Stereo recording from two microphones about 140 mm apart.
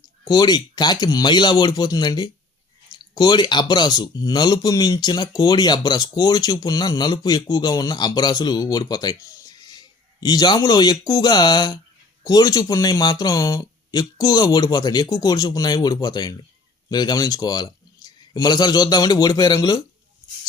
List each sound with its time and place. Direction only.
0.3 s a man's voice: 30° left (ahead or behind)